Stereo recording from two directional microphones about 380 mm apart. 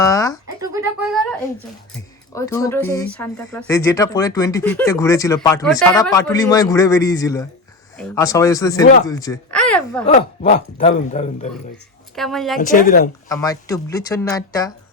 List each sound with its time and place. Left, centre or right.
0.0 s a sound: centre
0.7 s a woman's voice: centre
10.4 s speech: centre
12.1 s a woman's voice: centre
12.5 s speech: left
13.2 s speech: centre